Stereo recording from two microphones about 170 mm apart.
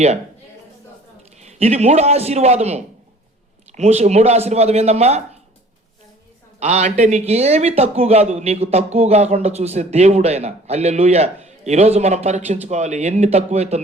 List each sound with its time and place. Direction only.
1.4 s a man's voice: 40° right (ahead or behind)
6.6 s a man's voice: 40° right (ahead or behind)